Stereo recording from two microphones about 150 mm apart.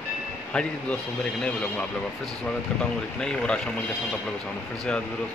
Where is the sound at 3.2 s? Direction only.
5° left (ahead or behind).